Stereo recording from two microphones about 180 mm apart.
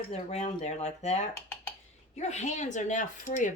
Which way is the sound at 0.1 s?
40° left (ahead or behind).